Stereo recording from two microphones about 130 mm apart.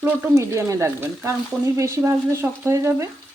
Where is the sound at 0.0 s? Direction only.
20° right (ahead or behind).